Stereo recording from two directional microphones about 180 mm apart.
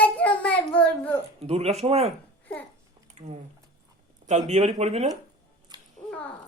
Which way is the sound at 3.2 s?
40° right (ahead or behind).